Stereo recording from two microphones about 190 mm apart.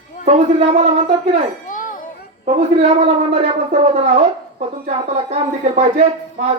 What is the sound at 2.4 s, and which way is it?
Speech, 35° right (ahead or behind).